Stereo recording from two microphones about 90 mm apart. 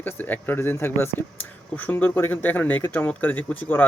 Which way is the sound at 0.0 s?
20° left (ahead or behind).